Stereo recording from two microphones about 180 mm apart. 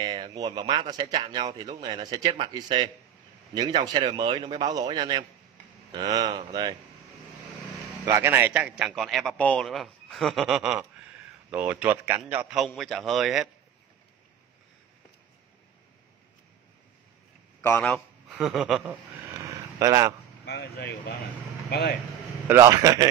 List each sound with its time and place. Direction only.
0.0 s speech: 25° right (ahead or behind)
8.0 s a man's voice: 10° right (ahead or behind)
17.6 s a man's voice: 10° left (ahead or behind)
18.3 s a man's voice: 5° right (ahead or behind)
19.2 s a sound: 20° right (ahead or behind)
20.4 s speech: 65° left (ahead or behind)
22.5 s speech: 20° right (ahead or behind)